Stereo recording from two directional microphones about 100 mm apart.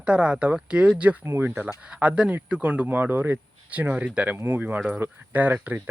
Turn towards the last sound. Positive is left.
turn(degrees=-15)  # may be behind; listen again after turning